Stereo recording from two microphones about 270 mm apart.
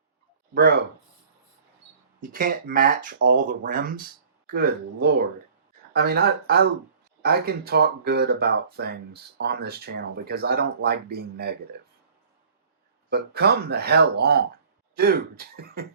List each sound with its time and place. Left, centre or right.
0.5 s speech: right
2.2 s speech: right
13.1 s speech: right